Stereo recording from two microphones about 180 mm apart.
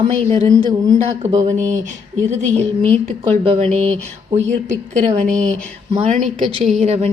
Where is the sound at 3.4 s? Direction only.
35° right (ahead or behind).